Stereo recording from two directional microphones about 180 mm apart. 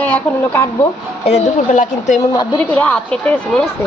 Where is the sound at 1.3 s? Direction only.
40° left (ahead or behind).